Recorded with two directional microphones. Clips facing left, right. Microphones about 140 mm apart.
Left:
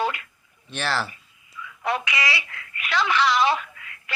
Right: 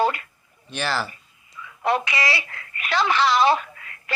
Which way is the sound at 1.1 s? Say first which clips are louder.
Right 1 dB; 35° right (ahead or behind).